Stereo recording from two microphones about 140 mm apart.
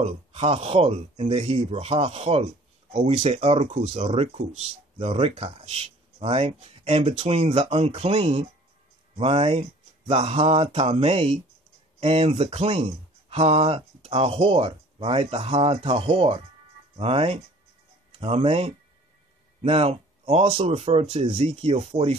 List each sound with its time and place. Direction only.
0.0 s speech: 45° right (ahead or behind)